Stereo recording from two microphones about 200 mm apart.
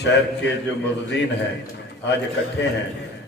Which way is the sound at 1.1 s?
60° left (ahead or behind).